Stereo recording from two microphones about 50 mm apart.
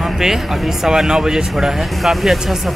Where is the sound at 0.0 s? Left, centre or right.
Centre.